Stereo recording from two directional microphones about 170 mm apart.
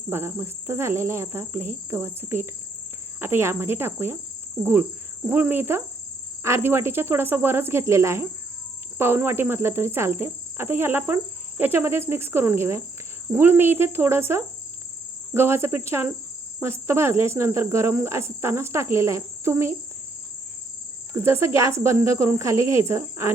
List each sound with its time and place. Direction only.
0.1 s cricket: 15° right (ahead or behind)
21.1 s cricket: 15° right (ahead or behind)